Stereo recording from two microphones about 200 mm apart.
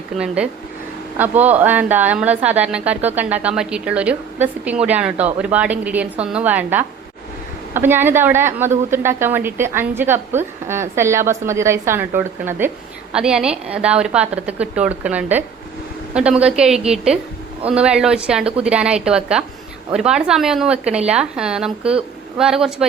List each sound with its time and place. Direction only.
1.2 s a woman's voice: 10° right (ahead or behind)